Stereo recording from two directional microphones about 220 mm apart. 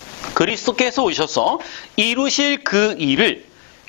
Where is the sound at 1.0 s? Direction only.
25° left (ahead or behind).